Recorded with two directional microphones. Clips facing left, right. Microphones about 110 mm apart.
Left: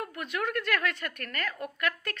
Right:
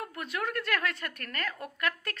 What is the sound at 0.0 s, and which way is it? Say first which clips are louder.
A woman's voice: left 2 dB; 30° right (ahead or behind).